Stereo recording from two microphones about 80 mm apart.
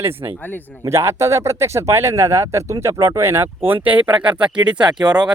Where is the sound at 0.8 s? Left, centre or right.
Right; by 4.1 s centre.